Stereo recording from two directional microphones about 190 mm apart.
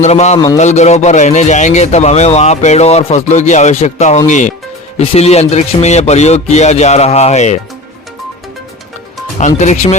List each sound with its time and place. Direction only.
0.0 s a man's voice: 35° left (ahead or behind)
0.3 s a man's voice: 20° left (ahead or behind)
0.6 s a man's voice: 35° left (ahead or behind)
9.4 s a man's voice: 40° left (ahead or behind)